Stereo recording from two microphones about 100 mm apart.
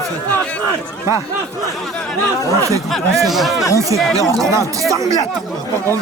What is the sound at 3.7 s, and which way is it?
Speech, 35° right (ahead or behind).